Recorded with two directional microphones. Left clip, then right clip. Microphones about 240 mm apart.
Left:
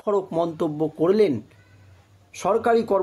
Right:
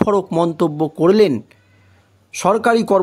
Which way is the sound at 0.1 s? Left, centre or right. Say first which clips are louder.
Right 6 dB; right.